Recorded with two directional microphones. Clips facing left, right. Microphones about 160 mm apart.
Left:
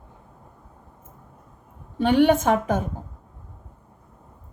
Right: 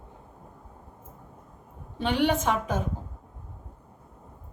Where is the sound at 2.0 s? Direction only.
50° left (ahead or behind).